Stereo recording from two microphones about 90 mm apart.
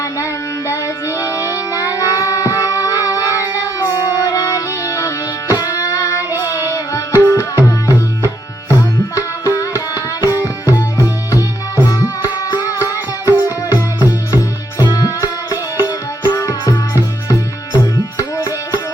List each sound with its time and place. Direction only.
0.7 s music: 35° left (ahead or behind)
9.6 s tabla: 35° left (ahead or behind)
10.2 s music: 40° left (ahead or behind)